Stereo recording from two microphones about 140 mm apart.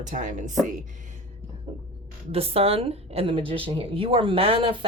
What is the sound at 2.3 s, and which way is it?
A woman's voice, 45° right (ahead or behind).